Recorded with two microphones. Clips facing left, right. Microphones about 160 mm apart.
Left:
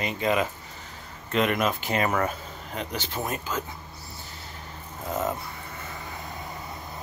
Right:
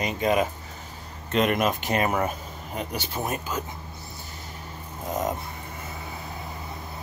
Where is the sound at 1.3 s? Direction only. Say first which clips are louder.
Right 1 dB; 20° right (ahead or behind).